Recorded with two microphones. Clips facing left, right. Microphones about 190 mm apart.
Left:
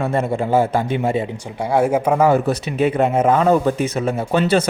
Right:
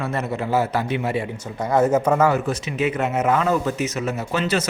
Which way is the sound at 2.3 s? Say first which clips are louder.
Left 5 dB; 35° left (ahead or behind).